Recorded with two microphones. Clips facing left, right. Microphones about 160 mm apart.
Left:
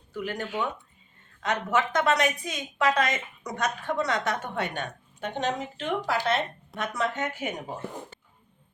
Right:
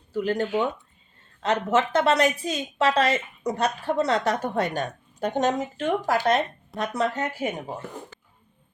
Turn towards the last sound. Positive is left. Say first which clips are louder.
# right 3 dB
turn(degrees=-30)  # may be behind; listen again after turning